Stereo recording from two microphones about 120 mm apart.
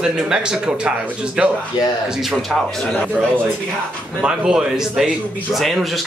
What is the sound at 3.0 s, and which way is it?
A man's voice, 15° right (ahead or behind).